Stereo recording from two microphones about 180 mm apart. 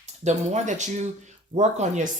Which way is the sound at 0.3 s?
40° right (ahead or behind).